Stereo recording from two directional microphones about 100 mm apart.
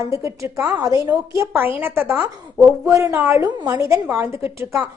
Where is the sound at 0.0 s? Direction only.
30° right (ahead or behind).